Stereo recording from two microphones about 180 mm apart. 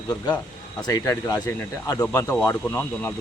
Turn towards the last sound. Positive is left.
turn(degrees=10)  # may be behind; listen again after turning